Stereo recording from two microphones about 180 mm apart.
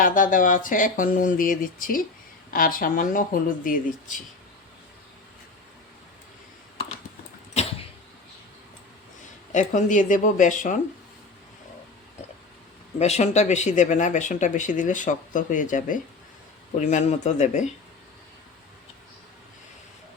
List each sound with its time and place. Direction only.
0.0 s speech: 50° left (ahead or behind)
7.5 s a sound: 35° left (ahead or behind)
9.5 s speech: 45° left (ahead or behind)
13.0 s speech: 35° left (ahead or behind)